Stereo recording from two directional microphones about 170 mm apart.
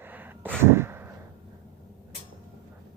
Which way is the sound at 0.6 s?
15° right (ahead or behind).